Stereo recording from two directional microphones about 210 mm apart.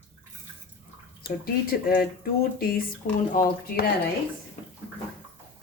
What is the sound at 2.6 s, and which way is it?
Speech, 45° left (ahead or behind).